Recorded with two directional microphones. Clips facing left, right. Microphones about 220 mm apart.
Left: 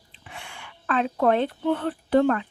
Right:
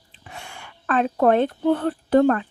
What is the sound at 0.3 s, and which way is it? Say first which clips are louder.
A woman's voice: right 2 dB; 40° right (ahead or behind).